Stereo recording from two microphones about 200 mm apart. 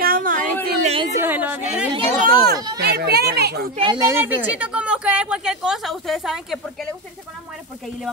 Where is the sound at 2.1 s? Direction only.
45° right (ahead or behind).